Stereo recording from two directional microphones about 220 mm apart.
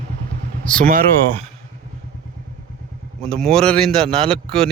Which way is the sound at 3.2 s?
5° left (ahead or behind).